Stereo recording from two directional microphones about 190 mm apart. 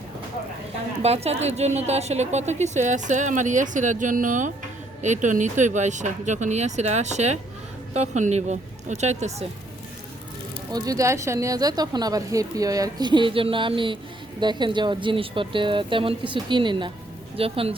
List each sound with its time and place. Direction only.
1.0 s a woman's voice: 35° right (ahead or behind)
10.7 s a woman's voice: 20° right (ahead or behind)